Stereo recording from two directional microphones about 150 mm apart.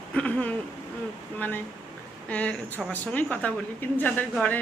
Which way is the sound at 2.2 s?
10° left (ahead or behind).